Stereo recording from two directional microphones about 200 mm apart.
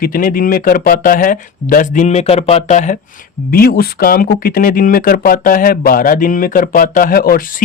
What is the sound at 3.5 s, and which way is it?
Speech, 50° left (ahead or behind).